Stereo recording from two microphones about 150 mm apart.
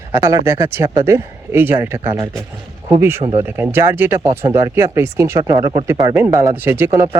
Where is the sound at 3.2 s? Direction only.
40° right (ahead or behind).